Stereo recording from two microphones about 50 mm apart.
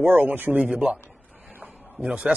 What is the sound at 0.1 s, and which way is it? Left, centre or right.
Speech, right.